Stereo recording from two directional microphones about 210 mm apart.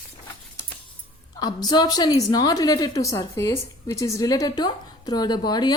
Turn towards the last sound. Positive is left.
turn(degrees=20)  # may be behind; listen again after turning